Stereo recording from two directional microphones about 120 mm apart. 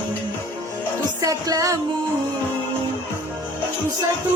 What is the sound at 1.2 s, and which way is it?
Music, 30° right (ahead or behind).